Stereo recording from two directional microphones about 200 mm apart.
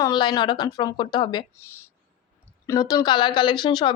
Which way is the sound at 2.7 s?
20° left (ahead or behind).